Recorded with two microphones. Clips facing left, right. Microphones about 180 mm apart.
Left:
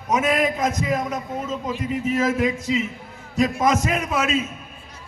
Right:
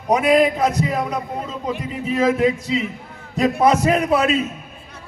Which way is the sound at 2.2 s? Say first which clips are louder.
Right 7 dB; 35° right (ahead or behind).